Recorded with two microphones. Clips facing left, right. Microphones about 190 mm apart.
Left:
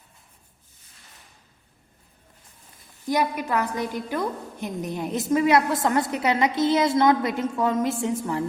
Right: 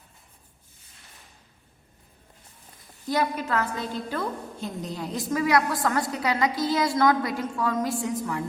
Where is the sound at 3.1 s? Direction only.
15° left (ahead or behind).